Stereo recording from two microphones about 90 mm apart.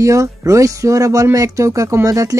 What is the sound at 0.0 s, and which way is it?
Speech, 35° right (ahead or behind).